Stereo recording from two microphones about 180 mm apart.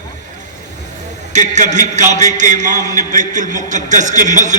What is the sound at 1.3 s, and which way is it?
A man's voice, 40° right (ahead or behind).